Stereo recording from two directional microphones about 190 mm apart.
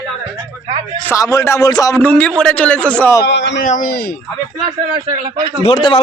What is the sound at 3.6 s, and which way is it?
Speech, 45° left (ahead or behind).